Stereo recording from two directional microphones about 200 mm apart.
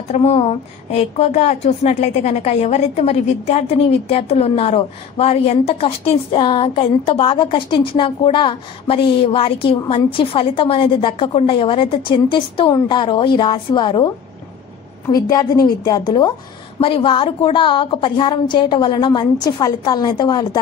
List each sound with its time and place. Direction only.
0.1 s a woman's voice: 30° left (ahead or behind)